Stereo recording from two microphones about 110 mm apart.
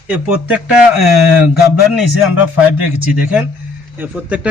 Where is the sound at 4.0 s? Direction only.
10° right (ahead or behind).